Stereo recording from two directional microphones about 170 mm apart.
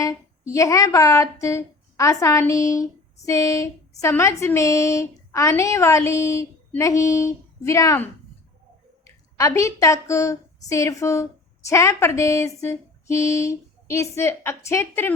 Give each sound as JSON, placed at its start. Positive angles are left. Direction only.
{"t": 0.0, "sound": "a woman's voice", "side_deg": 20}